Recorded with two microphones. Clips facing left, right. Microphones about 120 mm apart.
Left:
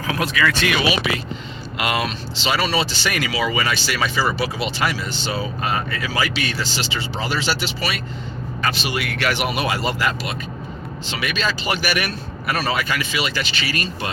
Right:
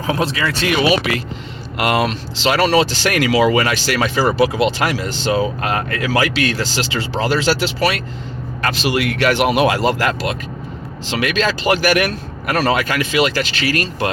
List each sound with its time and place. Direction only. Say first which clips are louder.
0.1 s speech: right 2 dB; 30° right (ahead or behind)
1.8 s speech: right 6 dB; 45° right (ahead or behind)
2.4 s speech: right 7 dB; 75° right (ahead or behind)
4.4 s a man's voice: right 8 dB; 90° right